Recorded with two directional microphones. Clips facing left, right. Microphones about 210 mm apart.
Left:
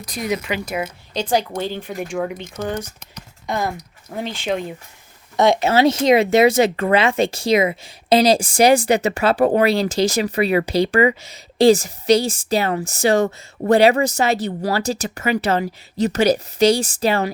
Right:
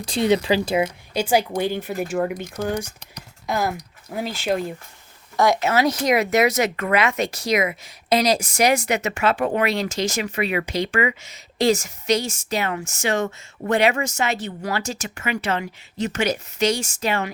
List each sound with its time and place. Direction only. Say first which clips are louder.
0.0 s speech: right 5 dB; 30° right (ahead or behind)
1.1 s speech: even; 10° right (ahead or behind)
2.6 s speech: even; 10° right (ahead or behind)
3.4 s speech: even; centre (ahead or behind)
5.4 s speech: left 4 dB; 25° left (ahead or behind)